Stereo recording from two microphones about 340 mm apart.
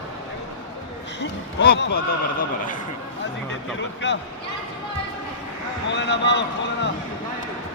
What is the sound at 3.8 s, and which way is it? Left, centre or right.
Speech, left.